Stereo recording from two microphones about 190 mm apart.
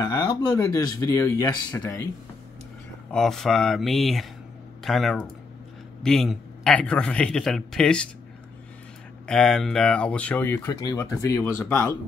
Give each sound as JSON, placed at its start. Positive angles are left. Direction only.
{"t": 0.0, "sound": "speech", "side_deg": 20}
{"t": 3.1, "sound": "a man's voice", "side_deg": 0}
{"t": 9.3, "sound": "speech", "side_deg": 5}